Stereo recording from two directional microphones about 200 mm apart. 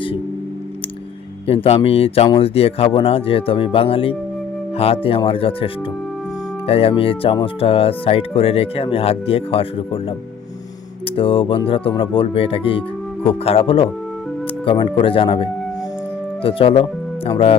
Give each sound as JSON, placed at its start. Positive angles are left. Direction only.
{"t": 1.5, "sound": "speech", "side_deg": 30}
{"t": 11.2, "sound": "speech", "side_deg": 25}